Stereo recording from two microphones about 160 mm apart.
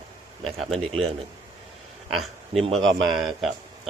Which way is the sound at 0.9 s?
40° right (ahead or behind).